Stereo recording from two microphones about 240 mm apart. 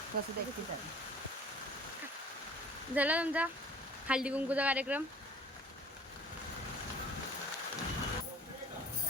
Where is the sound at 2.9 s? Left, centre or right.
Centre.